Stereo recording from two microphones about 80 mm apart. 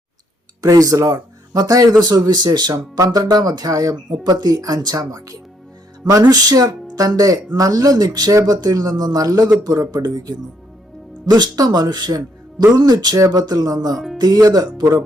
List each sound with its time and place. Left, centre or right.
0.6 s speech: right
3.0 s speech: right
4.2 s a man's voice: right
13.9 s speech: centre
14.2 s speech: right